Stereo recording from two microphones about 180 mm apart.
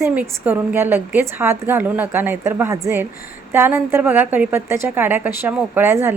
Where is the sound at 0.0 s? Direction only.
10° right (ahead or behind).